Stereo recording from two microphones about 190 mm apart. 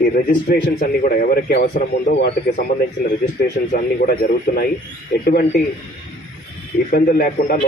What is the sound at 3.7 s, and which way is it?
A man's voice, 50° left (ahead or behind).